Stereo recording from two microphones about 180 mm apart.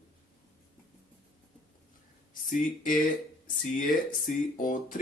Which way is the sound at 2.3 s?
45° left (ahead or behind).